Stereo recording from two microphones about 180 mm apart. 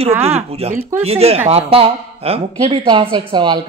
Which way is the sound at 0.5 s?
35° right (ahead or behind).